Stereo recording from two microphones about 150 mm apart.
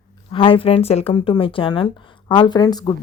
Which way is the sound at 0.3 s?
35° left (ahead or behind).